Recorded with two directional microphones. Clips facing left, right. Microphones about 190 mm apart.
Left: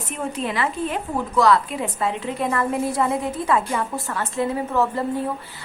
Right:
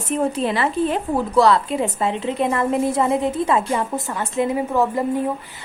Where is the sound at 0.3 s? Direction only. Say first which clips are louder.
Right 4 dB; 30° right (ahead or behind).